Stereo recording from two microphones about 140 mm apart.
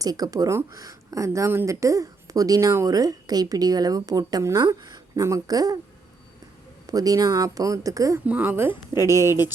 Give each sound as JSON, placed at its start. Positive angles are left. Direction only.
{"t": 0.0, "sound": "speech", "side_deg": -25}
{"t": 6.8, "sound": "speech", "side_deg": -25}
{"t": 8.3, "sound": "speech", "side_deg": -10}
{"t": 9.0, "sound": "speech", "side_deg": 25}
{"t": 9.2, "sound": "speech", "side_deg": -15}